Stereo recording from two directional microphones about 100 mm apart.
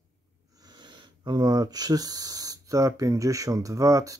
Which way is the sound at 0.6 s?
45° right (ahead or behind).